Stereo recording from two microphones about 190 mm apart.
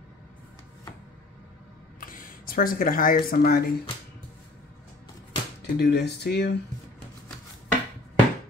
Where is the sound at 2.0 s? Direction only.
45° left (ahead or behind).